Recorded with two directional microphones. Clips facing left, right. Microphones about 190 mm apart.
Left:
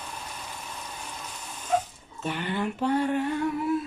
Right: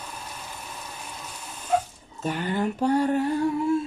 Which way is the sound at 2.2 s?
40° right (ahead or behind).